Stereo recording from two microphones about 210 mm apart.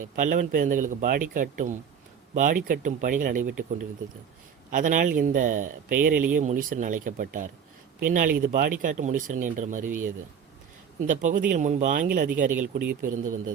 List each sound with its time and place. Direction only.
0.0 s speech: 40° right (ahead or behind)
11.0 s speech: 40° right (ahead or behind)